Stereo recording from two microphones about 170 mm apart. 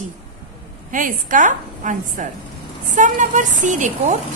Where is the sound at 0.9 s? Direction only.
50° right (ahead or behind).